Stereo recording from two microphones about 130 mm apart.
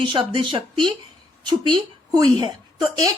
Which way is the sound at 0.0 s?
40° right (ahead or behind).